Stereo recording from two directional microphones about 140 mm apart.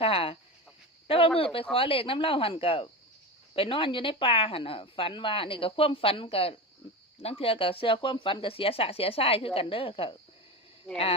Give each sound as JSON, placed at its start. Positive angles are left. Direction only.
{"t": 0.0, "sound": "chicken", "side_deg": 40}
{"t": 1.0, "sound": "a sound", "side_deg": 40}
{"t": 1.7, "sound": "speech", "side_deg": 40}